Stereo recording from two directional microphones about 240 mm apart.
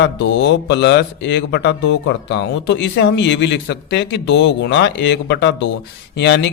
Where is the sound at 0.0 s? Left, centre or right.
Left.